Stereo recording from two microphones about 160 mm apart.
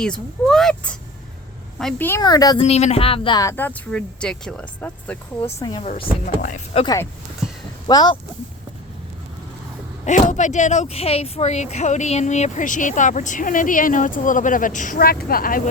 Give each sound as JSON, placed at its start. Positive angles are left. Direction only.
{"t": 0.0, "sound": "speech", "side_deg": 5}
{"t": 2.0, "sound": "speech", "side_deg": 20}
{"t": 2.6, "sound": "speech", "side_deg": 40}
{"t": 3.4, "sound": "speech", "side_deg": 10}
{"t": 5.5, "sound": "speech", "side_deg": 25}
{"t": 5.8, "sound": "speech", "side_deg": 40}
{"t": 6.2, "sound": "speech", "side_deg": 50}
{"t": 6.8, "sound": "speech", "side_deg": 20}
{"t": 10.1, "sound": "speech", "side_deg": 50}